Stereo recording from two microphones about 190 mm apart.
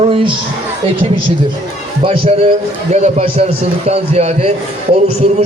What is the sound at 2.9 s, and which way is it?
A man's voice, 35° right (ahead or behind).